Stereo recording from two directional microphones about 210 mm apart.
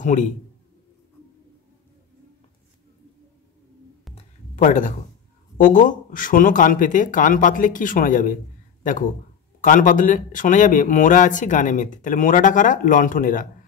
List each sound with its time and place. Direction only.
0.0 s a man's voice: 35° left (ahead or behind)
4.1 s a sound: 35° left (ahead or behind)
5.6 s speech: 40° left (ahead or behind)
9.6 s speech: 40° left (ahead or behind)